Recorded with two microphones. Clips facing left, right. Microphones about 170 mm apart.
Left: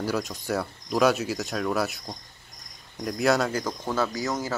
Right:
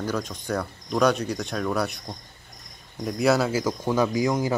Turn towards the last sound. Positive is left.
turn(degrees=-15)  # may be behind; listen again after turning